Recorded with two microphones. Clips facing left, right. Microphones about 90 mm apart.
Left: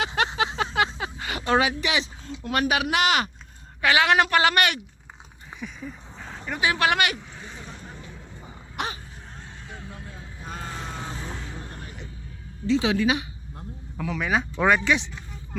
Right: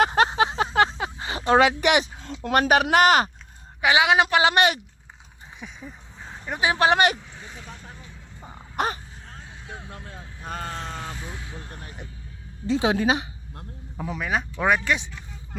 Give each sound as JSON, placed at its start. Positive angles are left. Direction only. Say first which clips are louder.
{"t": 0.0, "sound": "a sound", "louder": "right 5 dB", "side_deg": -40}
{"t": 1.6, "sound": "speech", "louder": "right 6 dB", "side_deg": -60}
{"t": 2.0, "sound": "a sound", "louder": "right 3 dB", "side_deg": -55}
{"t": 2.4, "sound": "speech", "louder": "right 5 dB", "side_deg": -40}
{"t": 3.8, "sound": "a woman's voice", "louder": "right 1 dB", "side_deg": -15}
{"t": 4.5, "sound": "speech", "louder": "right 3 dB", "side_deg": -25}
{"t": 5.5, "sound": "a sound", "louder": "left 4 dB", "side_deg": -15}
{"t": 6.4, "sound": "speech", "louder": "right 2 dB", "side_deg": -20}
{"t": 8.7, "sound": "throat clearing", "louder": "right 5 dB", "side_deg": -40}
{"t": 10.4, "sound": "vehicle", "louder": "right 4 dB", "side_deg": -60}
{"t": 10.7, "sound": "vehicle", "louder": "right 2 dB", "side_deg": 5}
{"t": 12.6, "sound": "speech", "louder": "even", "side_deg": -40}
{"t": 14.1, "sound": "speech", "louder": "left 2 dB", "side_deg": 0}